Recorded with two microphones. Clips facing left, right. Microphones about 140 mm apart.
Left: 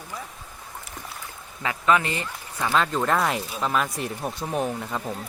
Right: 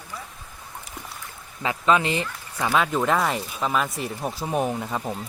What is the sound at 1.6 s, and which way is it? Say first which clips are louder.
Speech: right 1 dB; 20° right (ahead or behind).